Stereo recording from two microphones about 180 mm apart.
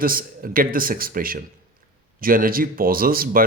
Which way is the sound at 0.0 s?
50° right (ahead or behind).